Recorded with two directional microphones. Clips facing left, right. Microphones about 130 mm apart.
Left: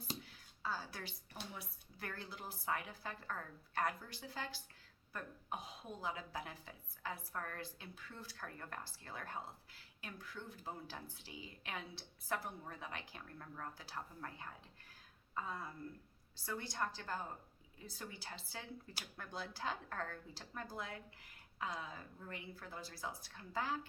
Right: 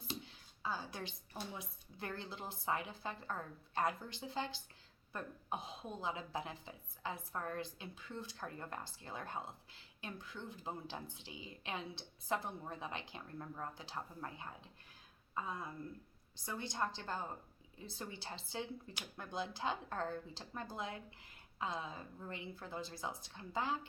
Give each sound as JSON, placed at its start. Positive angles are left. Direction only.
{"t": 0.2, "sound": "a woman's voice", "side_deg": -20}